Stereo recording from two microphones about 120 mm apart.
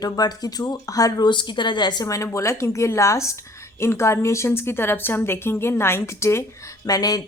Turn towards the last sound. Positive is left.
turn(degrees=30)  # may be behind; listen again after turning